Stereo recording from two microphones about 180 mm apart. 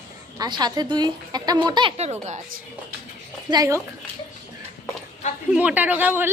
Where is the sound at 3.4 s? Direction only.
20° right (ahead or behind).